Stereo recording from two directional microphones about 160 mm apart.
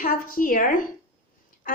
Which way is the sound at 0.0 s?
60° left (ahead or behind).